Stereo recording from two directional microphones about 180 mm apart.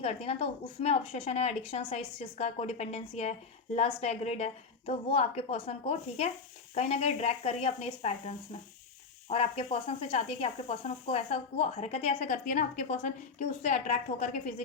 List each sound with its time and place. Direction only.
0.0 s speech: 35° left (ahead or behind)
9.3 s speech: 35° left (ahead or behind)